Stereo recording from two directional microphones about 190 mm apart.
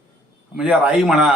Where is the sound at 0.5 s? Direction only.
5° right (ahead or behind).